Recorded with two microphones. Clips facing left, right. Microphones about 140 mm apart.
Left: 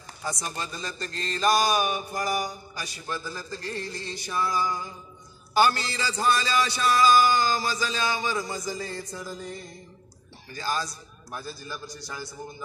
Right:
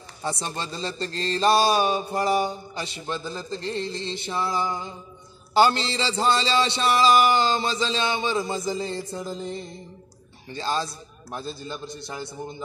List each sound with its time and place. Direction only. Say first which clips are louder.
0.2 s speech: right 3 dB; 30° right (ahead or behind)